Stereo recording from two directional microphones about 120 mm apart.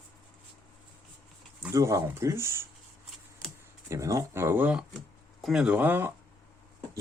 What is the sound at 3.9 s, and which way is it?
Speech, 25° right (ahead or behind).